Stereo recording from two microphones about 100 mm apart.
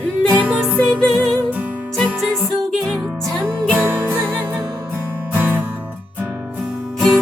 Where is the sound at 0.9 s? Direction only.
10° left (ahead or behind).